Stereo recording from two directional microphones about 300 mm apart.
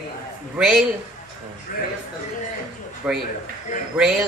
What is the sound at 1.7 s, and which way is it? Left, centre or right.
Speech, left.